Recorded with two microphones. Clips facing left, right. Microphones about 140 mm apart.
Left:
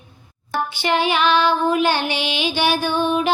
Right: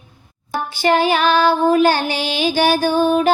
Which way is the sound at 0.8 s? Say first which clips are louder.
Right 5 dB; 40° right (ahead or behind).